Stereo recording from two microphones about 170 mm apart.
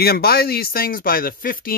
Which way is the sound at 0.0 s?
65° left (ahead or behind).